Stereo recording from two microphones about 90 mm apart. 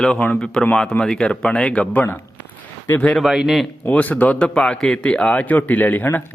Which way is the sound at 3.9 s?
20° left (ahead or behind).